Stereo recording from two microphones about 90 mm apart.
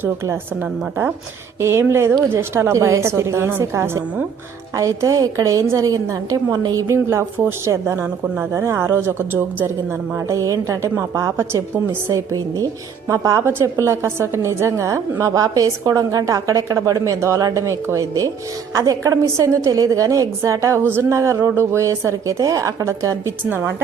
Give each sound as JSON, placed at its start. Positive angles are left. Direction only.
{"t": 1.6, "sound": "a woman's voice", "side_deg": -30}
{"t": 6.8, "sound": "a woman's voice", "side_deg": -30}
{"t": 10.2, "sound": "a woman's voice", "side_deg": -35}